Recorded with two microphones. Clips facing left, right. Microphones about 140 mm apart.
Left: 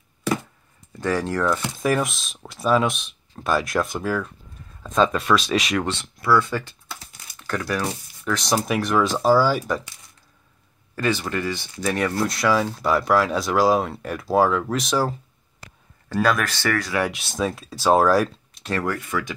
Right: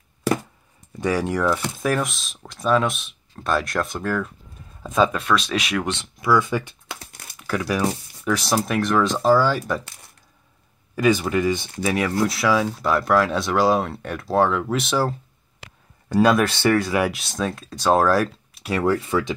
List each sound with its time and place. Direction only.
0.9 s speech: 10° right (ahead or behind)
1.6 s speech: centre (ahead or behind)
5.9 s speech: 15° right (ahead or behind)
7.3 s crumpling: 5° right (ahead or behind)
8.3 s speech: 5° right (ahead or behind)
11.0 s speech: 15° right (ahead or behind)
11.8 s speech: 5° right (ahead or behind)
16.1 s speech: 20° right (ahead or behind)
17.0 s speech: centre (ahead or behind)
18.8 s speech: 25° right (ahead or behind)